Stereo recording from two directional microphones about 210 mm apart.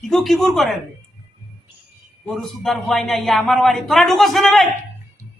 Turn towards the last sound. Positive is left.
turn(degrees=0)  # may be behind; listen again after turning